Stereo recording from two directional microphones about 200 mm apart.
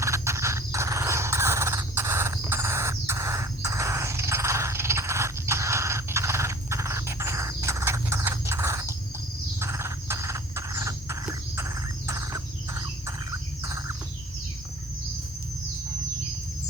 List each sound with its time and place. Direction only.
0.0 s a sound: 15° right (ahead or behind)
9.6 s cricket: 15° right (ahead or behind)
13.6 s bird: 20° right (ahead or behind)